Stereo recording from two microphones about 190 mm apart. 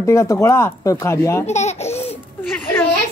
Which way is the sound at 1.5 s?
35° left (ahead or behind).